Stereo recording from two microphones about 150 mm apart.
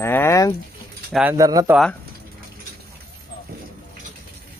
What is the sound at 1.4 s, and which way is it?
Speech, 25° right (ahead or behind).